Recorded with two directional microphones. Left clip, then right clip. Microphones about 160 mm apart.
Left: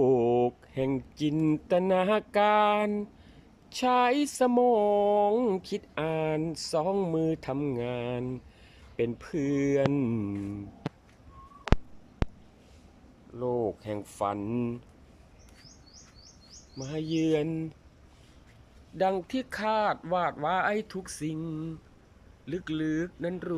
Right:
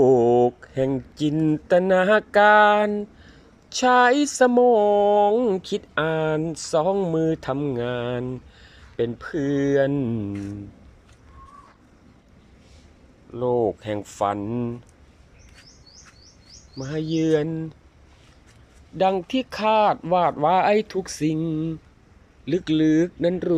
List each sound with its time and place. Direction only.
0.0 s speech: 10° left (ahead or behind)
13.3 s speech: 5° right (ahead or behind)
16.7 s speech: centre (ahead or behind)
18.9 s speech: centre (ahead or behind); by 23.6 s 20° right (ahead or behind)